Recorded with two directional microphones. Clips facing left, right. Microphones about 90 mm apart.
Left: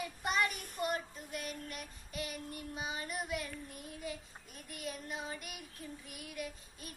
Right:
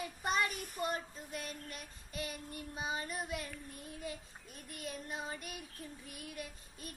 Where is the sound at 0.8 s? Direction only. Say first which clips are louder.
Left 2 dB; 35° right (ahead or behind).